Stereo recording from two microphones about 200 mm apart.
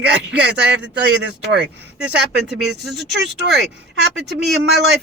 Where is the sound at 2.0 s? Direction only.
Centre (ahead or behind).